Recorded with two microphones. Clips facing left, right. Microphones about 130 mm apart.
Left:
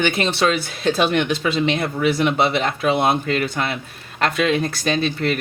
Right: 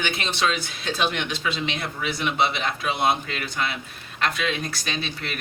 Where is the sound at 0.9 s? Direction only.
55° left (ahead or behind).